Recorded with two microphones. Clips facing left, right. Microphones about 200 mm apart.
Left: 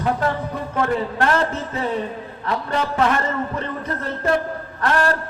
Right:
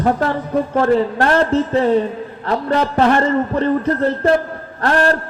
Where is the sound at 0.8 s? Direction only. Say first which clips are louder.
Right 5 dB; 35° right (ahead or behind).